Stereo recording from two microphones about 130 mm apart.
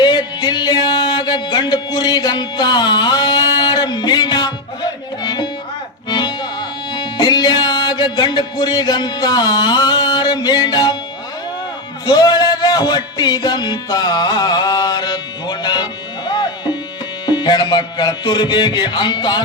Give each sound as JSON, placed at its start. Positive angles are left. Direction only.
{"t": 0.0, "sound": "music", "side_deg": 35}
{"t": 12.0, "sound": "music", "side_deg": 30}